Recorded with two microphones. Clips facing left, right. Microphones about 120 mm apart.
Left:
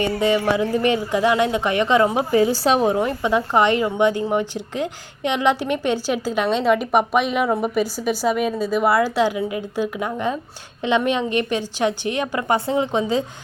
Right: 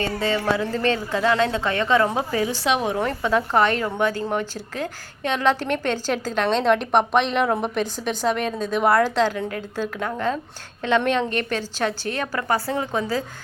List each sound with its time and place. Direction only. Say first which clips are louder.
0.0 s a woman's voice: left 4 dB; 15° left (ahead or behind)
2.4 s a woman's voice: left 5 dB; 35° left (ahead or behind)
2.9 s a woman's voice: left 2 dB; 15° left (ahead or behind)